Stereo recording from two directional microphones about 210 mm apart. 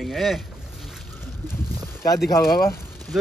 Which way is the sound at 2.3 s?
15° left (ahead or behind).